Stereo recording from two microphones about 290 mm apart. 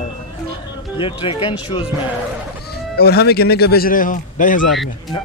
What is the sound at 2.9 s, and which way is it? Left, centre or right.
Speech, left.